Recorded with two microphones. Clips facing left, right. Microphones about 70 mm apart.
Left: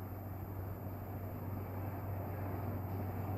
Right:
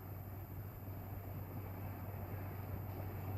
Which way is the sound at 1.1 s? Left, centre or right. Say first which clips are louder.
Left 5 dB; left.